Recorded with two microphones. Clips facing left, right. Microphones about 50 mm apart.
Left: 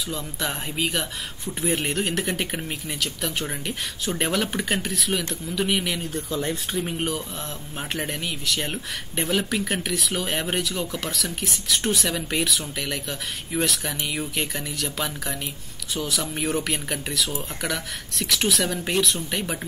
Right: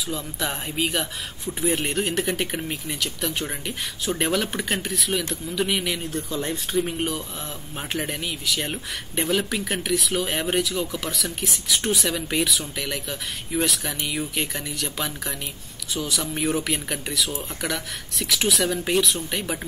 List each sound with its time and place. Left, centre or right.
0.1 s speech: centre